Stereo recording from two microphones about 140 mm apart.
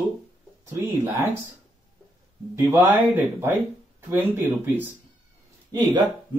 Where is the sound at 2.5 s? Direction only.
20° right (ahead or behind).